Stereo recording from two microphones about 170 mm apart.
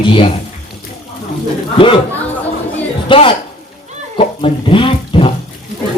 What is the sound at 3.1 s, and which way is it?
A man's voice, 30° left (ahead or behind).